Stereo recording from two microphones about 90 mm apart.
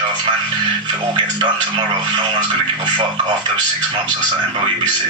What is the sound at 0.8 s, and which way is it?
Speech, 55° right (ahead or behind).